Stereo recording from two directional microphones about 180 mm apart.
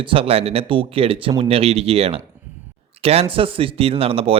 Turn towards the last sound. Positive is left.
turn(degrees=-30)  # may be behind; listen again after turning